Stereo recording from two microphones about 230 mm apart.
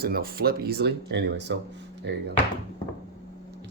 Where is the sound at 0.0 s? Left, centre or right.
Right.